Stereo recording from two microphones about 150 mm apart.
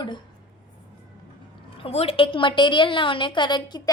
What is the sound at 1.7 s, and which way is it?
A woman's voice, 40° left (ahead or behind).